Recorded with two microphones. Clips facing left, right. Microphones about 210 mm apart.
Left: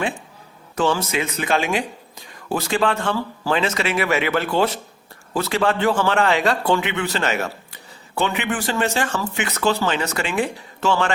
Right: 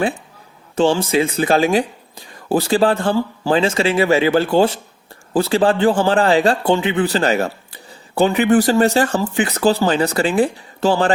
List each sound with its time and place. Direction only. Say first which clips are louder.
0.8 s a man's voice: right 6 dB; 30° right (ahead or behind)